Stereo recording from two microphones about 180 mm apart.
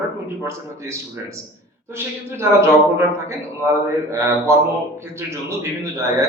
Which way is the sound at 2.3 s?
15° right (ahead or behind).